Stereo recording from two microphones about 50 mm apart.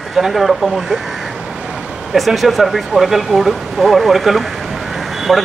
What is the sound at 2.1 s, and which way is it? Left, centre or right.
Speech, centre.